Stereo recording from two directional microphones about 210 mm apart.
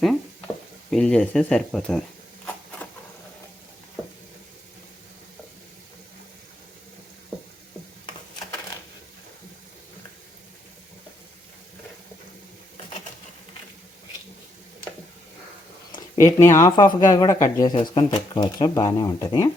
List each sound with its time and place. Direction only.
0.0 s speech: centre (ahead or behind)
15.9 s speech: 15° left (ahead or behind)